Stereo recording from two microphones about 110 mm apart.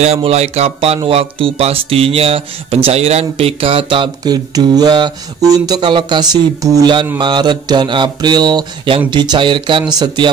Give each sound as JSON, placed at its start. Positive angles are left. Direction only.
{"t": 0.0, "sound": "speech", "side_deg": -70}